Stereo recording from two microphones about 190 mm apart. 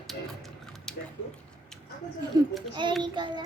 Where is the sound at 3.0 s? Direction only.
25° right (ahead or behind).